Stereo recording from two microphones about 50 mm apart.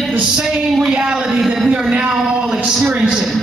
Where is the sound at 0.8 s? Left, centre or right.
Centre.